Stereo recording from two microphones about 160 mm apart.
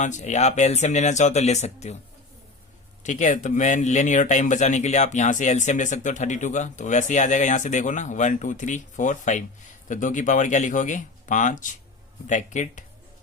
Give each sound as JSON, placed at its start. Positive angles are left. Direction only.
{"t": 0.0, "sound": "speech", "side_deg": 50}
{"t": 3.0, "sound": "speech", "side_deg": 50}